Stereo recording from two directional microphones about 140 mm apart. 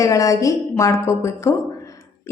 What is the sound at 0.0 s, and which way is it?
A woman's voice, 25° left (ahead or behind).